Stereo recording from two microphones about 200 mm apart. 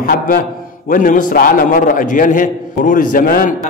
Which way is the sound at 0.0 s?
45° left (ahead or behind).